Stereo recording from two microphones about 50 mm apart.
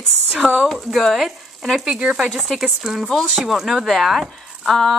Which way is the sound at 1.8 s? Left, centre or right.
Centre.